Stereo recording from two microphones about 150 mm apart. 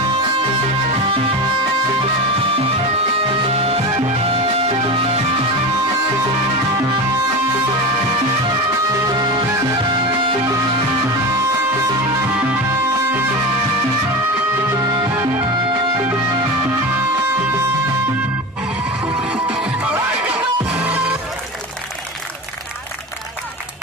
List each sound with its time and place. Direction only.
3.5 s music: 40° right (ahead or behind)
9.0 s music: 30° right (ahead or behind)
14.8 s music: 25° right (ahead or behind)
19.2 s music: 10° right (ahead or behind)